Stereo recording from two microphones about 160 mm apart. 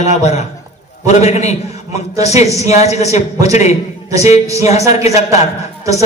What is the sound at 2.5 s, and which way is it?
A man's voice, 45° left (ahead or behind).